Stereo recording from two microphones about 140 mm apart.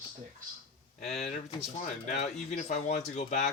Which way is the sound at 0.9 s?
50° left (ahead or behind).